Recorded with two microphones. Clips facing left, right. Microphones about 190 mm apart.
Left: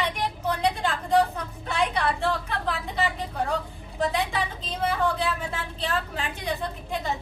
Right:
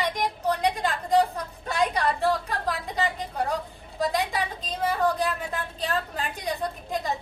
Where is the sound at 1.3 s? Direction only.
35° right (ahead or behind).